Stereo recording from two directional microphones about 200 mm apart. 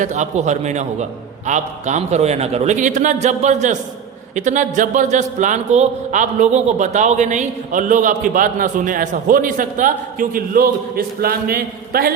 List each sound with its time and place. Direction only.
0.0 s speech: 35° right (ahead or behind)